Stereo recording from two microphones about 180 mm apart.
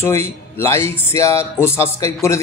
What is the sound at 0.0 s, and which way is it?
Speech, 15° left (ahead or behind).